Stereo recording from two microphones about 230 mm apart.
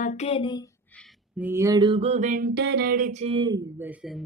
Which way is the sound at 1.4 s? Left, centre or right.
Centre.